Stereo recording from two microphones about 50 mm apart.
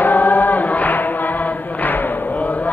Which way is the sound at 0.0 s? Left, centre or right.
Left.